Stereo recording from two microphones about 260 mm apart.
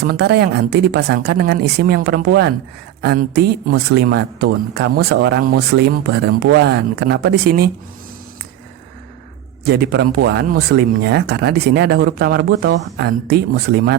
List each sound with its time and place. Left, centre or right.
0.0 s speech: right
9.6 s speech: right